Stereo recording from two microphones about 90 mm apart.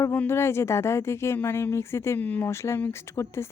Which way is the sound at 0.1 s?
25° left (ahead or behind).